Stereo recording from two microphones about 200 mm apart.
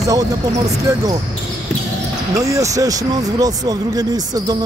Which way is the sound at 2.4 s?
15° right (ahead or behind).